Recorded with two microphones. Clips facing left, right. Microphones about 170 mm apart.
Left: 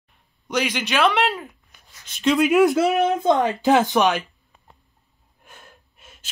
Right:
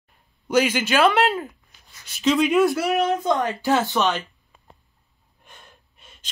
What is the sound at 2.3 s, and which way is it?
Speech, 5° left (ahead or behind).